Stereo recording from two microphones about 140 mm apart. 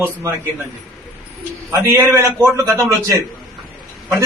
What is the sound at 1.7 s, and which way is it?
Speech, 20° right (ahead or behind).